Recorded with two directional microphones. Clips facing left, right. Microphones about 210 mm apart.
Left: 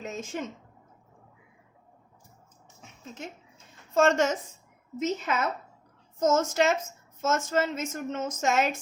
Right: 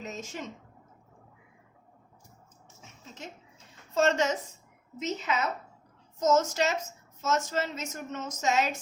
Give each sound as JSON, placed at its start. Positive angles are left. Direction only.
{"t": 0.0, "sound": "a woman's voice", "side_deg": 50}
{"t": 3.9, "sound": "a woman's voice", "side_deg": 50}